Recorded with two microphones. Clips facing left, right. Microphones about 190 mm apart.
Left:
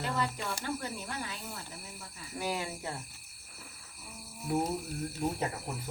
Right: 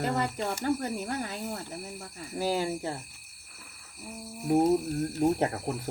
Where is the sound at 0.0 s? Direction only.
50° right (ahead or behind); by 2.9 s 30° right (ahead or behind).